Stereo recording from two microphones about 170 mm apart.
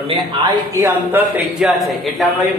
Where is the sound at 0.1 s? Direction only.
25° right (ahead or behind).